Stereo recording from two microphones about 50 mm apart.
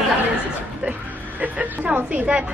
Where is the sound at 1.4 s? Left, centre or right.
Right.